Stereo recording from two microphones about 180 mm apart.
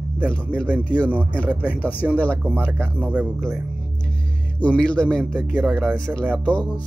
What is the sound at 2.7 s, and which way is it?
Speech, 10° right (ahead or behind).